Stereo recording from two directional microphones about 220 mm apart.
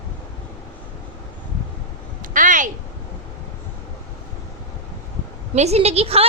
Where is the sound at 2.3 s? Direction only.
35° right (ahead or behind).